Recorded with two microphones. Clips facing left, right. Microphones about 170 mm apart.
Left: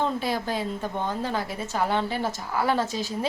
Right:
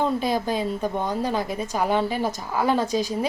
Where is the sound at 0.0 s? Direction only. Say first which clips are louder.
Right 4 dB; 15° right (ahead or behind).